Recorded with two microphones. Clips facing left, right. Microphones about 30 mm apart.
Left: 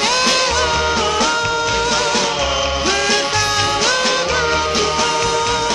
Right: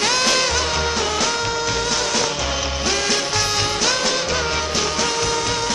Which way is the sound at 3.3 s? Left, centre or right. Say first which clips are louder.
Left 4 dB; centre.